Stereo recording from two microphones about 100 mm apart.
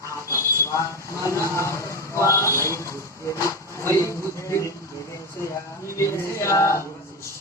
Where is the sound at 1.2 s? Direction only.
30° left (ahead or behind).